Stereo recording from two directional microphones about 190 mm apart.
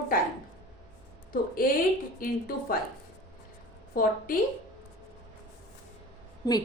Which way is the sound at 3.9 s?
50° left (ahead or behind).